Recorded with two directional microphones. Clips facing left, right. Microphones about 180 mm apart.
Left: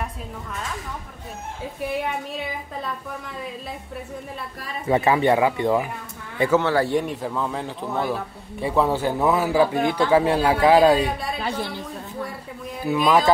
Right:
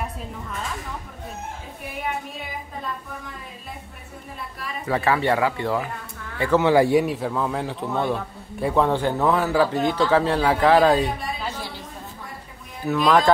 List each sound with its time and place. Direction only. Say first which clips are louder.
4.8 s speech: left 3 dB; 20° left (ahead or behind)
6.6 s a man's voice: right 4 dB; 15° right (ahead or behind); by 11.1 s 10° left (ahead or behind)
11.3 s a woman's voice: left 4 dB; 60° left (ahead or behind)
12.8 s speech: even; 5° left (ahead or behind)